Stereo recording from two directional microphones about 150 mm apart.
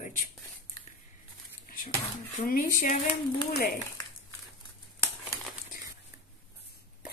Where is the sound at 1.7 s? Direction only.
70° left (ahead or behind).